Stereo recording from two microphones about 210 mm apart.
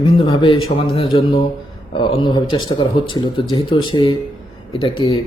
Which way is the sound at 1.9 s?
25° left (ahead or behind).